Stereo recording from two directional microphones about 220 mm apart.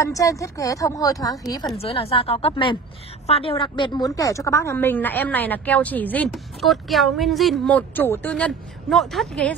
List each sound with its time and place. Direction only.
0.0 s a woman's voice: 15° left (ahead or behind)
1.8 s a woman's voice: 25° left (ahead or behind); by 9.6 s 5° left (ahead or behind)